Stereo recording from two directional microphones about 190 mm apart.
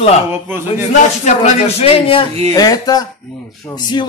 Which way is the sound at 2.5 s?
20° left (ahead or behind).